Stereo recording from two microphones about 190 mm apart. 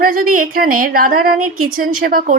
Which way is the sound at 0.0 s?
45° right (ahead or behind).